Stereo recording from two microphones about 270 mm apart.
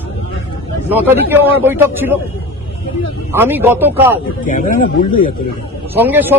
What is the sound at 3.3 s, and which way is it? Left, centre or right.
Speech, centre.